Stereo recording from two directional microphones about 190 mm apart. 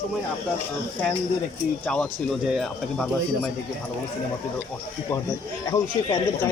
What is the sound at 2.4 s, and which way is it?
Speech, centre (ahead or behind).